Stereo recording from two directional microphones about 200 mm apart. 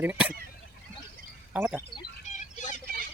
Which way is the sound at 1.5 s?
10° right (ahead or behind).